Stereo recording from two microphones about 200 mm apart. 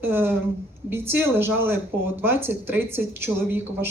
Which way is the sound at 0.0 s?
10° right (ahead or behind).